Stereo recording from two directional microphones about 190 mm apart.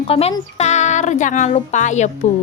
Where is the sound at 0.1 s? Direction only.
30° left (ahead or behind).